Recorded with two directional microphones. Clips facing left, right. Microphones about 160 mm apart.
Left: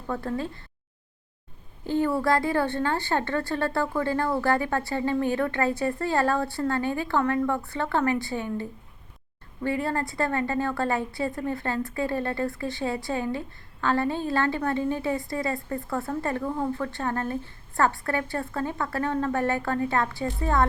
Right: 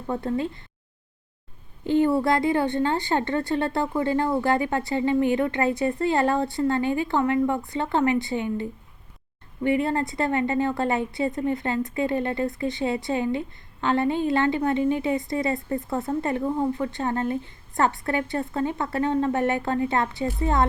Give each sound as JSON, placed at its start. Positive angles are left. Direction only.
{"t": 0.1, "sound": "a woman's voice", "side_deg": -20}
{"t": 1.9, "sound": "a woman's voice", "side_deg": -25}
{"t": 9.6, "sound": "a woman's voice", "side_deg": -20}